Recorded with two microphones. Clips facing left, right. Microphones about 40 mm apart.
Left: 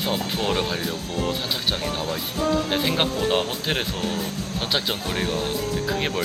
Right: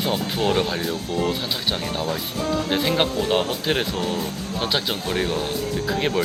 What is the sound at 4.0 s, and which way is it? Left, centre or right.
Speech, centre.